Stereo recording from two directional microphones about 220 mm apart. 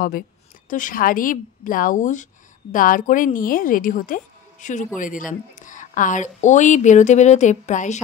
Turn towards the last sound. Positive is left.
turn(degrees=35)  # may be behind; listen again after turning